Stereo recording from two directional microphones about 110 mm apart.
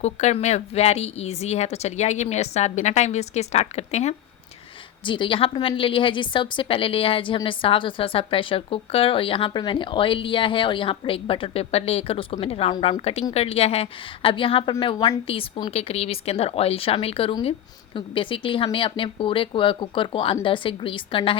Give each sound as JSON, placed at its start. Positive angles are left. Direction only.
{"t": 0.0, "sound": "a woman's voice", "side_deg": 90}
{"t": 5.0, "sound": "a woman's voice", "side_deg": 50}
{"t": 15.7, "sound": "a woman's voice", "side_deg": 65}